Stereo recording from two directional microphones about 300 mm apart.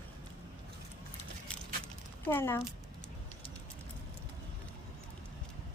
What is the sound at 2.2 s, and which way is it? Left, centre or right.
Speech, centre.